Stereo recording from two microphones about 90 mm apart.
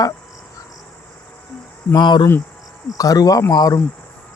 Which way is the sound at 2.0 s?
55° left (ahead or behind).